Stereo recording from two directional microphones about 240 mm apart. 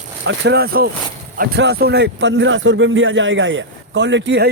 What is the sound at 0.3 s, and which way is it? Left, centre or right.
A man's voice, right.